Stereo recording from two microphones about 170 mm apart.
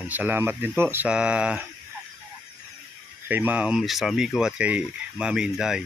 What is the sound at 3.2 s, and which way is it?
Speech, 10° right (ahead or behind).